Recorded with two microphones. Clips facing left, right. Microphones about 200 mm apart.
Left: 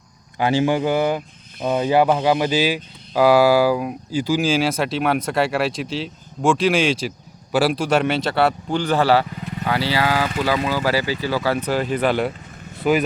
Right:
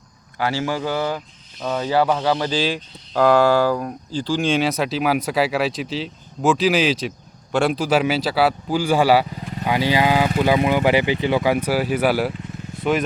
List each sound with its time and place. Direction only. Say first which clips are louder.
0.3 s speech: left 5 dB; 20° left (ahead or behind); by 12.3 s 5° right (ahead or behind)
12.8 s speech: left 2 dB; 5° left (ahead or behind)